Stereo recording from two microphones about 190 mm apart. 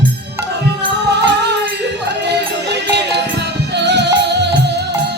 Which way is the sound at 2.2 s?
65° right (ahead or behind).